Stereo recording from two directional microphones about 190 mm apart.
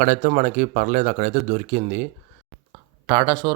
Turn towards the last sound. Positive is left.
turn(degrees=-20)  # may be behind; listen again after turning